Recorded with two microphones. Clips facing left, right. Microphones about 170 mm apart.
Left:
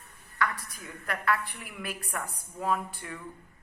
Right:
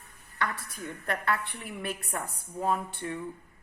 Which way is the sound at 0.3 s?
25° right (ahead or behind).